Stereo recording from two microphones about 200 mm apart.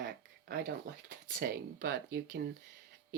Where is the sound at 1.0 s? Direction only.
45° right (ahead or behind).